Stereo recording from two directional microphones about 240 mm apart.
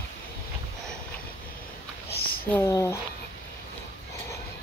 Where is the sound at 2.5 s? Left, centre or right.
Centre.